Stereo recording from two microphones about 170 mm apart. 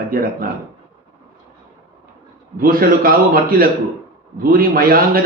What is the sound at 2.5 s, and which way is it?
Speech, 60° right (ahead or behind).